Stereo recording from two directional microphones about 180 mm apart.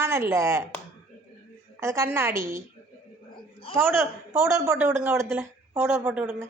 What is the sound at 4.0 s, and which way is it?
A woman's voice, 15° right (ahead or behind).